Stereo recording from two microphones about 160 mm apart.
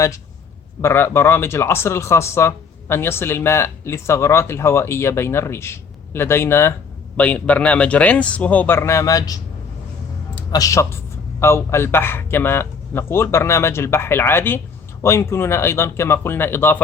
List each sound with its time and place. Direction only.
0.8 s speech: 15° left (ahead or behind)